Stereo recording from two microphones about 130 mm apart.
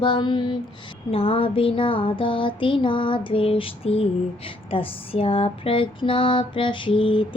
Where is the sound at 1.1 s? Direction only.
45° left (ahead or behind).